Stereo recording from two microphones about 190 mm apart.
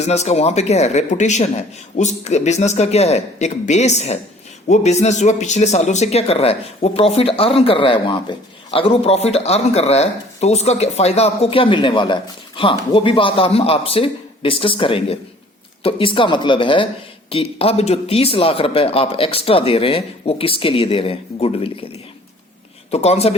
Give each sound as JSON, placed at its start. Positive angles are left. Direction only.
{"t": 0.0, "sound": "speech", "side_deg": 35}
{"t": 22.9, "sound": "speech", "side_deg": 35}